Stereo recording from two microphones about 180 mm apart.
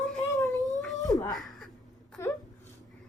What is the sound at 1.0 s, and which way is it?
Wail, 20° left (ahead or behind).